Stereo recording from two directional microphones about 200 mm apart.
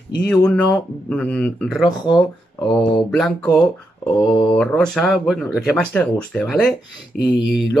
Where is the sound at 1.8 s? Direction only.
20° left (ahead or behind).